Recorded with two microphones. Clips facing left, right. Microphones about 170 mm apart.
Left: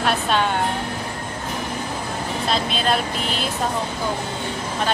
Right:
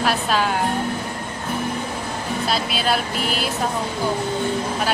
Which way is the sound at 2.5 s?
5° right (ahead or behind).